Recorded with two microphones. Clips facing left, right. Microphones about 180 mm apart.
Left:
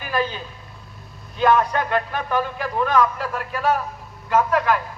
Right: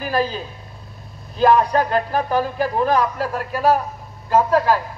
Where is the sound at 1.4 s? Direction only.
35° right (ahead or behind).